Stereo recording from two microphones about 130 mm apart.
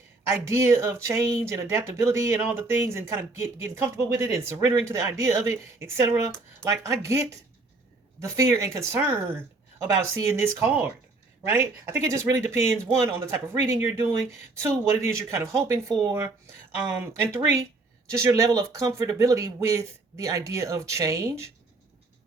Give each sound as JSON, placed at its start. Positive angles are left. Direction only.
{"t": 0.3, "sound": "speech", "side_deg": -25}